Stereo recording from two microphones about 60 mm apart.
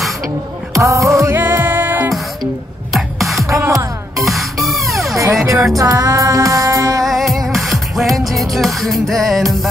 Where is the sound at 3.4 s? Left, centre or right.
Right.